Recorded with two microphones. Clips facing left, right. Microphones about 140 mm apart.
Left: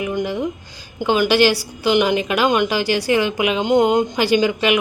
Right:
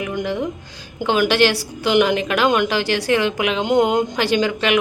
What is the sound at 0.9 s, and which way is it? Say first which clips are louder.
A woman's voice: left 1 dB; centre (ahead or behind).